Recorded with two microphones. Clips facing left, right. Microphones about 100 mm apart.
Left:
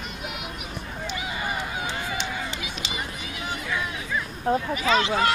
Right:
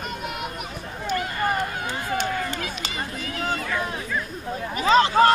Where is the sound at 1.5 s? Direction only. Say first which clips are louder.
Right 4 dB; 45° right (ahead or behind).